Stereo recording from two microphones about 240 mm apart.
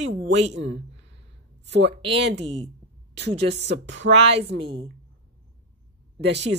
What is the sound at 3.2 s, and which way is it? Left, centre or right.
Speech, right.